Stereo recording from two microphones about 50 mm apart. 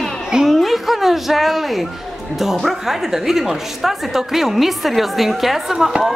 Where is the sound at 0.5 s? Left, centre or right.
Centre.